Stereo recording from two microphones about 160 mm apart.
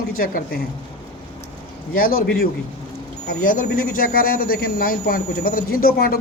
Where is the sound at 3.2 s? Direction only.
65° left (ahead or behind).